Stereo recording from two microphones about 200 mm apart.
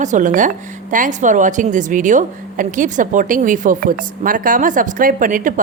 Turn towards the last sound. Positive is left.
turn(degrees=-40)  # may be behind; listen again after turning